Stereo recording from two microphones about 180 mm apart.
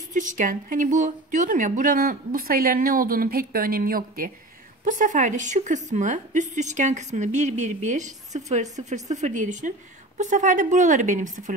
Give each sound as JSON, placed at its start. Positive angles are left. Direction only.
{"t": 0.1, "sound": "a woman's voice", "side_deg": -45}